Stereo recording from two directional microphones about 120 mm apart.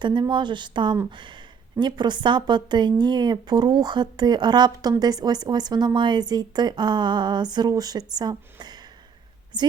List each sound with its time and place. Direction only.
0.0 s a woman's voice: 40° right (ahead or behind)